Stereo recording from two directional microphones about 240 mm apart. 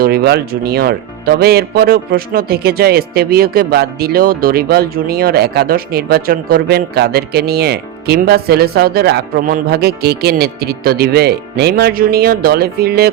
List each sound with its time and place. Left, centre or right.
0.0 s speech: right